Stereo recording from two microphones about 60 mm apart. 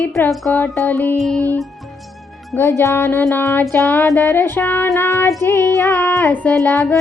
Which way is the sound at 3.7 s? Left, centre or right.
Left.